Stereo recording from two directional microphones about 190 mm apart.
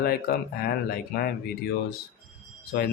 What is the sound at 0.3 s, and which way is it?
Speech, 50° left (ahead or behind).